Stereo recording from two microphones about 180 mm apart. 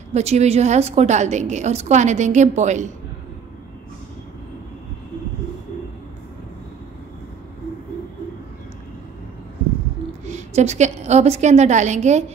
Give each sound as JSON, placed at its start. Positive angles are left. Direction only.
{"t": 0.1, "sound": "a woman's voice", "side_deg": -35}
{"t": 10.2, "sound": "a woman's voice", "side_deg": -40}